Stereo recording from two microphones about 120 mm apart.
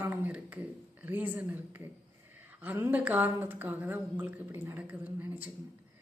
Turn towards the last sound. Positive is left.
turn(degrees=-15)  # may be behind; listen again after turning